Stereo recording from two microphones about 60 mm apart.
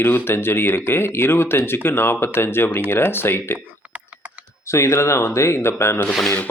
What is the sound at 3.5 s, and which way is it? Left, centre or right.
Typing, right.